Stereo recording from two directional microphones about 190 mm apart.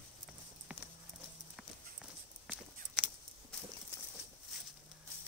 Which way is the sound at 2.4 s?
5° right (ahead or behind).